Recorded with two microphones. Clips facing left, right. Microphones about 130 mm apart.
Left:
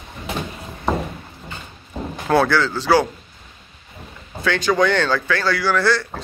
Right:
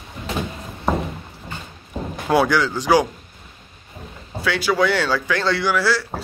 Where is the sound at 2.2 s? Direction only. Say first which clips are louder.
Left 1 dB; 15° right (ahead or behind).